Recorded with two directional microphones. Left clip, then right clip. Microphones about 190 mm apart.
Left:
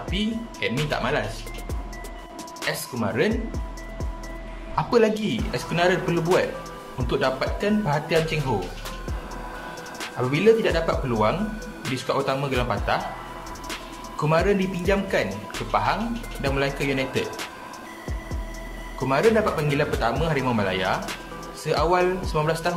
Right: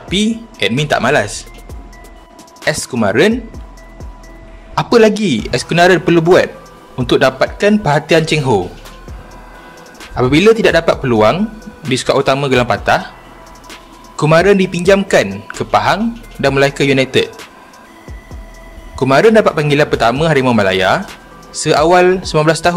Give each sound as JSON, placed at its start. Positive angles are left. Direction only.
{"t": 0.1, "sound": "speech", "side_deg": -65}
{"t": 2.6, "sound": "speech", "side_deg": -60}
{"t": 4.7, "sound": "speech", "side_deg": -55}
{"t": 10.1, "sound": "speech", "side_deg": -55}
{"t": 14.1, "sound": "speech", "side_deg": -55}
{"t": 19.0, "sound": "speech", "side_deg": -60}